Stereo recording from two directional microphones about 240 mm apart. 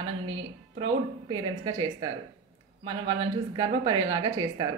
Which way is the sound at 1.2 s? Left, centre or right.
Centre.